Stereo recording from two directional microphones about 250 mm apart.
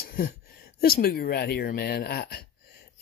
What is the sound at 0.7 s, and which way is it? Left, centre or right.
A man's voice, left.